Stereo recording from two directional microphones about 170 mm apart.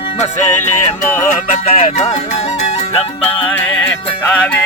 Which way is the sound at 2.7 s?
35° left (ahead or behind).